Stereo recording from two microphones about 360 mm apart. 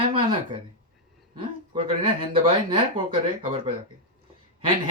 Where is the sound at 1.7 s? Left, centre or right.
Centre.